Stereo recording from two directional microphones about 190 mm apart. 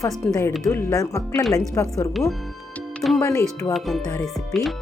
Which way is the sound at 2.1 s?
Centre (ahead or behind).